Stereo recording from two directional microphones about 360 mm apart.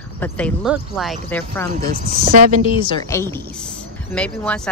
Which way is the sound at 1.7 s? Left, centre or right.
Right.